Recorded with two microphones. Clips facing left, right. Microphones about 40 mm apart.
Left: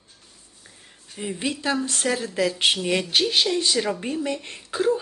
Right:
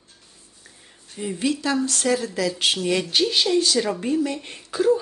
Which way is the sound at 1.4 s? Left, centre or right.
Left.